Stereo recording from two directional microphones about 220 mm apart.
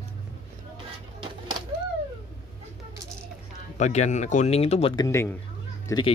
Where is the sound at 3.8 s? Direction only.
30° left (ahead or behind).